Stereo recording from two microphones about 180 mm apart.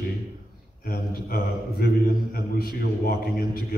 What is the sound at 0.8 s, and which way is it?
A man's voice, 55° left (ahead or behind).